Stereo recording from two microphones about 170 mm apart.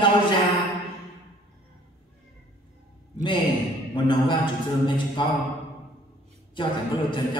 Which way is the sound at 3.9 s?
25° left (ahead or behind).